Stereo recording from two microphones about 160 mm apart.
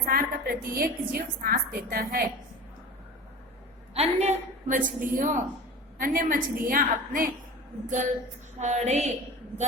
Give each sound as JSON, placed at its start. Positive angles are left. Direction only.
{"t": 0.0, "sound": "a woman's voice", "side_deg": -65}
{"t": 3.9, "sound": "a woman's voice", "side_deg": -45}